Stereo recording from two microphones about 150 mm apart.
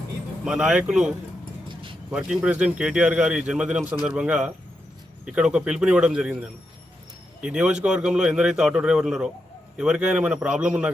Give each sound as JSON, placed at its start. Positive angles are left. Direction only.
{"t": 0.4, "sound": "speech", "side_deg": -5}
{"t": 1.6, "sound": "vehicle", "side_deg": -35}
{"t": 2.0, "sound": "speech", "side_deg": -5}
{"t": 7.4, "sound": "a man's voice", "side_deg": -5}